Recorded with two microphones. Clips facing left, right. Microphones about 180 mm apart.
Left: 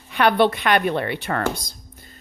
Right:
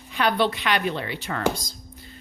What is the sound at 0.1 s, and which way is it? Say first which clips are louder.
A woman's voice: left 5 dB; 60° left (ahead or behind).